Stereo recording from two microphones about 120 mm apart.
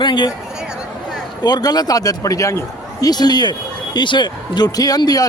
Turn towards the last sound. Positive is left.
turn(degrees=30)  # may be behind; listen again after turning